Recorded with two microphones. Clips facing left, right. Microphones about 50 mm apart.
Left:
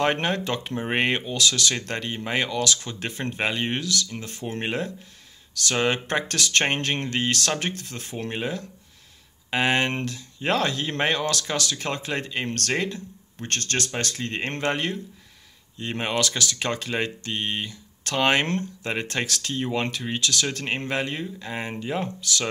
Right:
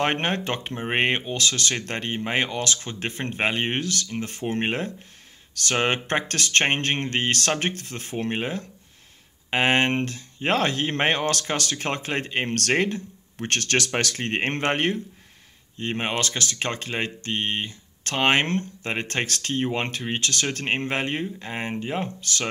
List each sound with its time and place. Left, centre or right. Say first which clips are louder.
0.0 s speech: left 1 dB; right
0.7 s speech: right 1 dB; centre; by 6.6 s right
6.7 s speech: right 1 dB; right
7.1 s speech: right 1 dB; right
12.5 s speech: right 5 dB; right
13.5 s speech: right 4 dB; right
15.8 s speech: right 1 dB; right
16.2 s speech: left 1 dB; right
19.2 s speech: right 2 dB; right
19.6 s speech: left 1 dB; right
20.2 s speech: left 2 dB; right
20.6 s speech: right 2 dB; right